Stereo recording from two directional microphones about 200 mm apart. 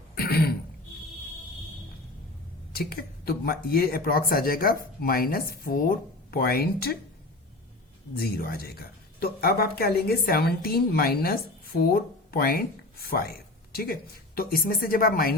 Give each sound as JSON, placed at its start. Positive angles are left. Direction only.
{"t": 0.2, "sound": "throat clearing", "side_deg": 50}
{"t": 2.7, "sound": "a woman's voice", "side_deg": 50}
{"t": 8.1, "sound": "a woman's voice", "side_deg": 50}